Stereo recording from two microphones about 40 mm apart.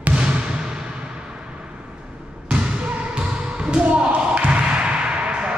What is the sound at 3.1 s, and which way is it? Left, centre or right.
Basketball bounce, right.